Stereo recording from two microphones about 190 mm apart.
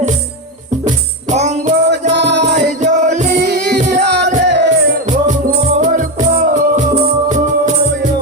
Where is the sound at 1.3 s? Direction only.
35° right (ahead or behind).